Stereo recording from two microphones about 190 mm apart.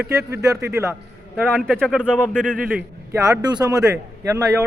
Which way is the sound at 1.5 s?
5° left (ahead or behind).